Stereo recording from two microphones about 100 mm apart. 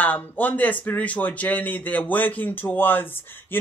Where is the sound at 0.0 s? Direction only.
15° left (ahead or behind).